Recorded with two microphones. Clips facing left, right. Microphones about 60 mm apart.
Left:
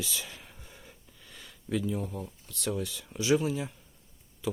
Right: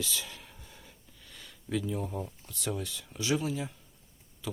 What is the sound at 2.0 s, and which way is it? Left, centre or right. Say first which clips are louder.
Speech: right 2 dB; centre.